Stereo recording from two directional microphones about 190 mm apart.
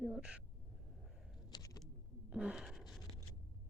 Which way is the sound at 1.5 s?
20° left (ahead or behind).